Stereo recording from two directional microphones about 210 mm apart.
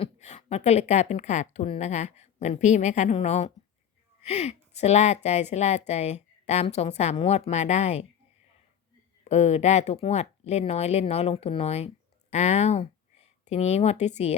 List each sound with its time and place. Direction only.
0.0 s a woman's voice: 30° left (ahead or behind)
9.2 s a woman's voice: 30° left (ahead or behind)